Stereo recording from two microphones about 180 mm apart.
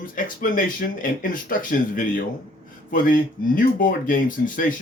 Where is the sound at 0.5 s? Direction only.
50° left (ahead or behind).